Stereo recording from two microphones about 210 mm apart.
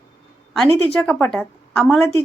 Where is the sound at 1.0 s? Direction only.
5° left (ahead or behind).